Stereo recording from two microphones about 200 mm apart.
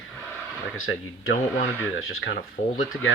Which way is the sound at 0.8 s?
90° left.